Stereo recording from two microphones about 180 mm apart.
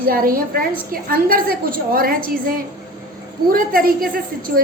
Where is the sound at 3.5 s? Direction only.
55° right (ahead or behind).